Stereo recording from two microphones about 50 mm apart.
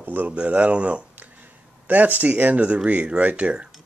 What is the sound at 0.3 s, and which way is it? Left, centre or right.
Speech, right.